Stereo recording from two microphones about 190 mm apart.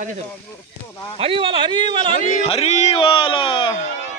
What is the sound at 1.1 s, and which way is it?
Speech, 30° right (ahead or behind).